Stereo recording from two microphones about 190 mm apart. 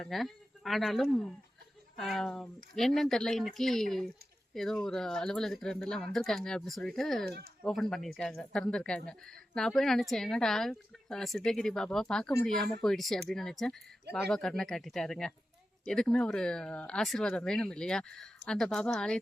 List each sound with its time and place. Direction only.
0.0 s speech: centre (ahead or behind)
7.3 s speech: 60° right (ahead or behind)
7.7 s speech: centre (ahead or behind)